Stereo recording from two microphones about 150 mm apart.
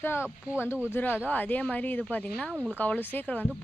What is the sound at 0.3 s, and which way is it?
Speech, 10° right (ahead or behind).